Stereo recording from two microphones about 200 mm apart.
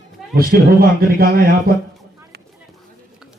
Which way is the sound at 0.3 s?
50° right (ahead or behind).